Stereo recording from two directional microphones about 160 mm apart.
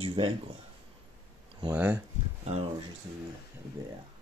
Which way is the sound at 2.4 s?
45° right (ahead or behind).